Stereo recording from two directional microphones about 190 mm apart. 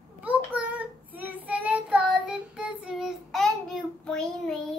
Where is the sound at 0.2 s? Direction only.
5° right (ahead or behind).